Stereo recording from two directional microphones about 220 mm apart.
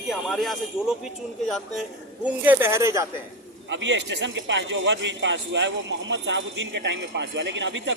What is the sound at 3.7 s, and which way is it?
A man's voice, 55° right (ahead or behind).